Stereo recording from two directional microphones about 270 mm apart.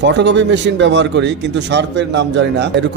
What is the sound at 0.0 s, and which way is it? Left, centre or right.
Speech, right.